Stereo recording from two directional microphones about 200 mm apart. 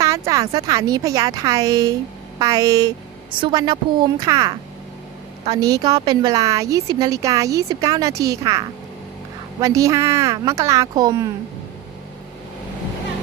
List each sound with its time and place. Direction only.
0.0 s a woman's voice: 15° right (ahead or behind)